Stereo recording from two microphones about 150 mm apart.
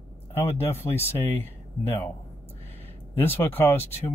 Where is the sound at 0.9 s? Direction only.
15° left (ahead or behind).